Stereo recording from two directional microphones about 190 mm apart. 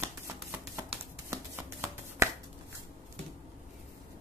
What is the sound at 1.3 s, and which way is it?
Shuffling cards, 15° right (ahead or behind).